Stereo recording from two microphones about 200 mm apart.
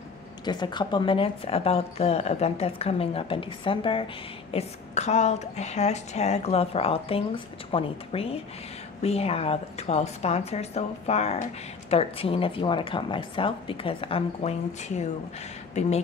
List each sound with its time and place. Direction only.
0.5 s a woman's voice: 20° left (ahead or behind)